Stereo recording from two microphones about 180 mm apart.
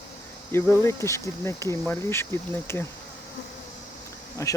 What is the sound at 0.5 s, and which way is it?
Cricket, 15° left (ahead or behind).